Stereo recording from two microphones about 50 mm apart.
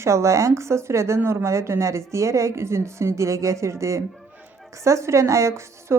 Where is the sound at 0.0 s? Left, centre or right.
Right.